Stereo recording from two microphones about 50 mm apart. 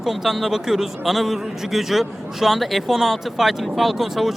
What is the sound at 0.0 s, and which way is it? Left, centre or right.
A man's voice, centre.